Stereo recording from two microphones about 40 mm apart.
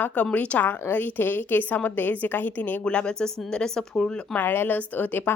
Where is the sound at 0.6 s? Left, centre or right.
Left.